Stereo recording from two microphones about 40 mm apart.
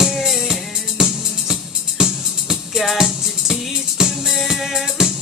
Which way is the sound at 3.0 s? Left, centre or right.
Centre.